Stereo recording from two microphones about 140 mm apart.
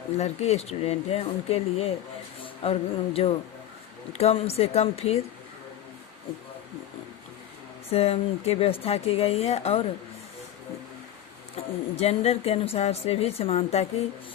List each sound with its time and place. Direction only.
0.2 s a woman's voice: 50° left (ahead or behind)
7.9 s a woman's voice: 45° left (ahead or behind)
11.5 s a woman's voice: 50° left (ahead or behind)